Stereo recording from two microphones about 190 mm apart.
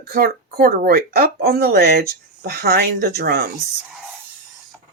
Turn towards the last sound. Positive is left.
turn(degrees=-55)  # may be behind; listen again after turning